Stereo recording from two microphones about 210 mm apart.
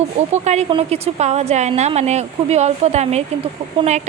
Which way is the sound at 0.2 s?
35° right (ahead or behind).